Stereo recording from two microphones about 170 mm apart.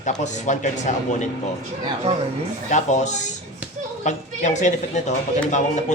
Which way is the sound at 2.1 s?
35° right (ahead or behind).